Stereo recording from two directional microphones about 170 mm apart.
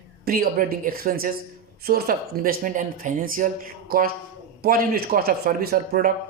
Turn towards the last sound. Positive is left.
turn(degrees=-60)  # may be behind; listen again after turning